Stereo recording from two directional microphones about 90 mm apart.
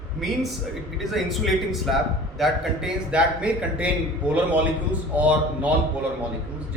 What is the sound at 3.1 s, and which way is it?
Speech, 15° right (ahead or behind).